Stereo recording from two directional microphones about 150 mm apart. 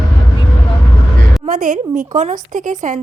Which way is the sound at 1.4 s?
60° right (ahead or behind).